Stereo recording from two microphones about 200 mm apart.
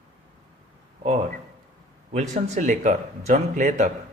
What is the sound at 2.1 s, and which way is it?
A man's voice, 35° right (ahead or behind).